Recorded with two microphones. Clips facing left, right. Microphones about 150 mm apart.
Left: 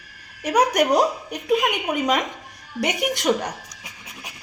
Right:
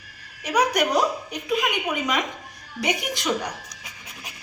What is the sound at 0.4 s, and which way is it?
Speech, 45° left (ahead or behind).